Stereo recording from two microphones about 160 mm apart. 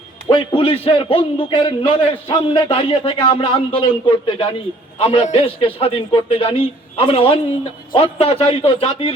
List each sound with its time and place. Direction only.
0.3 s a man's voice: 35° left (ahead or behind)